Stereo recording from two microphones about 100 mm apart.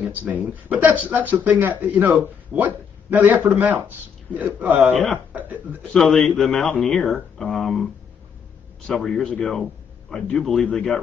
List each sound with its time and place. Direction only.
0.0 s a man's voice: 15° right (ahead or behind)
5.9 s a man's voice: 5° left (ahead or behind)